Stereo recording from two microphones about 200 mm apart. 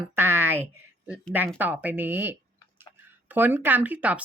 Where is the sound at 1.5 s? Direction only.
10° right (ahead or behind).